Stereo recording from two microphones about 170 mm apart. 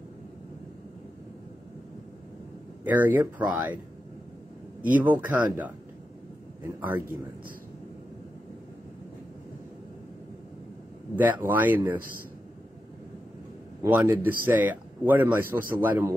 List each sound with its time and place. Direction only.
2.8 s speech: 10° right (ahead or behind)
4.8 s speech: 10° right (ahead or behind)
11.1 s speech: 10° right (ahead or behind)
13.8 s speech: 10° right (ahead or behind)